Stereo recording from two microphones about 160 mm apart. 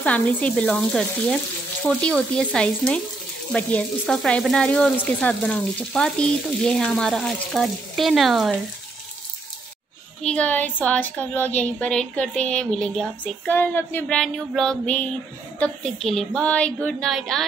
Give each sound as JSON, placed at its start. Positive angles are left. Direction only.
{"t": 0.0, "sound": "a woman's voice", "side_deg": 10}
{"t": 1.9, "sound": "frying", "side_deg": 5}
{"t": 10.2, "sound": "a woman's voice", "side_deg": 10}
{"t": 15.6, "sound": "frying", "side_deg": 5}